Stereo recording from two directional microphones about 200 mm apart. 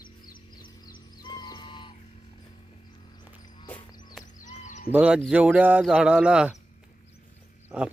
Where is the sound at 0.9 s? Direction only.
20° left (ahead or behind).